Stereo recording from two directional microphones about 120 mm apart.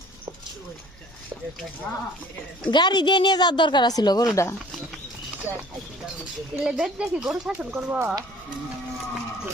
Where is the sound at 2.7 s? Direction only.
40° left (ahead or behind).